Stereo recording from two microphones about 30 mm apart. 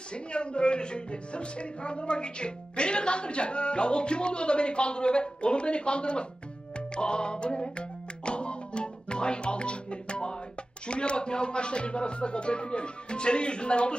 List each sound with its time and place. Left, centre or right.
0.1 s speech: left
6.7 s music: left
10.8 s speech: left